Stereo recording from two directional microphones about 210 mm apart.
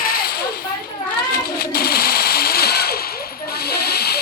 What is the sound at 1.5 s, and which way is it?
Bird, 45° left (ahead or behind).